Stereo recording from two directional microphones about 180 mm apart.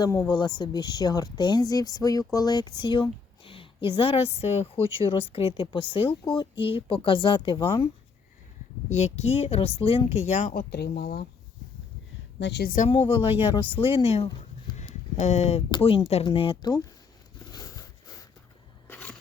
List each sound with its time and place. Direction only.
0.0 s speech: 20° left (ahead or behind)
8.9 s speech: 40° left (ahead or behind)
10.5 s speech: 60° left (ahead or behind)
12.4 s speech: 70° left (ahead or behind)
12.9 s speech: 30° left (ahead or behind)
14.8 s a sound: 40° left (ahead or behind)
15.7 s speech: 30° left (ahead or behind)
17.5 s a sound: 20° left (ahead or behind)
18.9 s a sound: 10° left (ahead or behind)